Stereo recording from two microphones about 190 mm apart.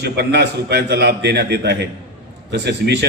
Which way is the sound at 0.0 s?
60° right (ahead or behind).